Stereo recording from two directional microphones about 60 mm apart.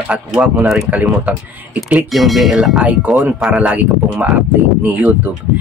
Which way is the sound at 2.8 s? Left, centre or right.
Right.